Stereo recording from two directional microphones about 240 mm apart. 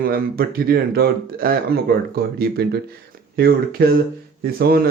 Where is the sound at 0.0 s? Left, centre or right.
Right.